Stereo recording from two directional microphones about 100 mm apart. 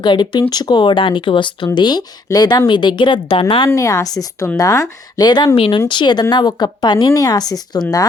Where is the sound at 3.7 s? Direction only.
35° left (ahead or behind).